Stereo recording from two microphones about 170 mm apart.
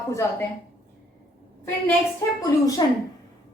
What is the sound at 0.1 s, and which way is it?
Speech, 15° left (ahead or behind).